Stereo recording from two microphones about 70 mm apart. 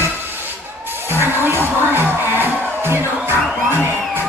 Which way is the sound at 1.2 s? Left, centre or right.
Right.